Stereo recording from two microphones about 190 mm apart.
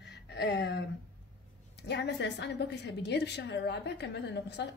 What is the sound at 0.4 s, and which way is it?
Speech, 65° left (ahead or behind).